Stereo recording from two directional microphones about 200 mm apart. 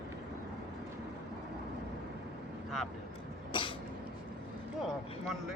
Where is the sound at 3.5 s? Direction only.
25° left (ahead or behind).